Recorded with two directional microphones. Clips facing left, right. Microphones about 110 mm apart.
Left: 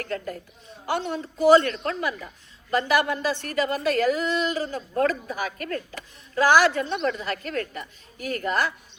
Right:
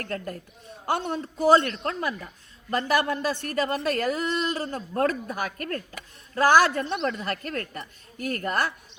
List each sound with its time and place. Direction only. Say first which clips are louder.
0.0 s a woman's voice: left 2 dB; 45° right (ahead or behind)